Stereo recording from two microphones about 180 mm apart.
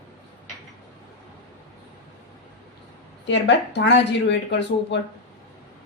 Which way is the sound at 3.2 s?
80° left.